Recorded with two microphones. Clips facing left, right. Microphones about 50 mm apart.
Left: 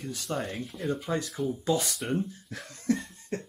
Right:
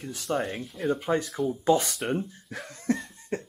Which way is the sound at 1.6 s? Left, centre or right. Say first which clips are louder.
Right 6 dB; right.